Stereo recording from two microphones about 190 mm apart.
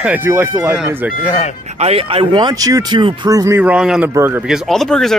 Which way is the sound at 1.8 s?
30° right (ahead or behind).